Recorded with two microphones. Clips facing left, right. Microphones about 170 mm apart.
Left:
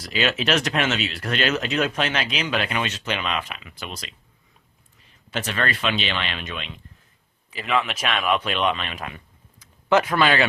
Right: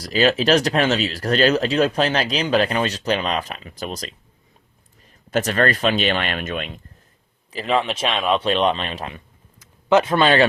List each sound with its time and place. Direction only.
0.0 s speech: 35° right (ahead or behind)
7.5 s speech: 35° right (ahead or behind)